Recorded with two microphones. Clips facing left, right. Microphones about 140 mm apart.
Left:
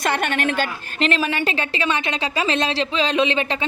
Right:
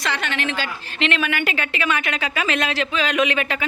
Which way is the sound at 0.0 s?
50° left (ahead or behind).